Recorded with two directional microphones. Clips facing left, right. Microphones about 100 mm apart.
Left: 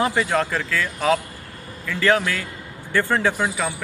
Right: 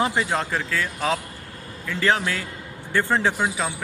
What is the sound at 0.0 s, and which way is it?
Speech, 20° right (ahead or behind).